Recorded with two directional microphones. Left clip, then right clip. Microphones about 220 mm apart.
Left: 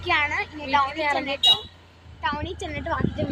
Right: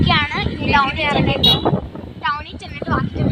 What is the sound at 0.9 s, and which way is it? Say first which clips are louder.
Speech: right 6 dB; 10° right (ahead or behind).